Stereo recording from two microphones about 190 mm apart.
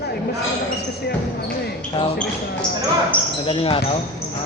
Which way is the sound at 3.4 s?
30° left (ahead or behind).